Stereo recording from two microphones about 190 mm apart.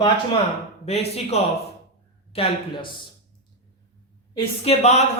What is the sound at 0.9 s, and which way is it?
A man's voice, 35° left (ahead or behind).